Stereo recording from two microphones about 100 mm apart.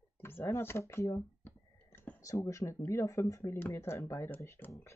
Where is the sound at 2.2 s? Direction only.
30° left (ahead or behind).